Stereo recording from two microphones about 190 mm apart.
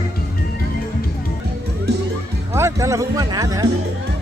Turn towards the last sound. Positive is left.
turn(degrees=-20)  # may be behind; listen again after turning